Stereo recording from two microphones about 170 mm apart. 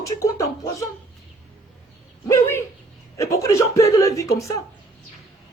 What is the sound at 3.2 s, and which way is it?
Speech, 20° left (ahead or behind).